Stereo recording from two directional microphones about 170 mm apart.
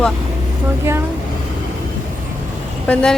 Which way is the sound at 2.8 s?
5° left (ahead or behind).